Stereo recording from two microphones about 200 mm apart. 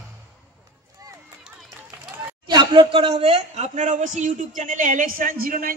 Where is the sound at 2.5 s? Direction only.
25° right (ahead or behind).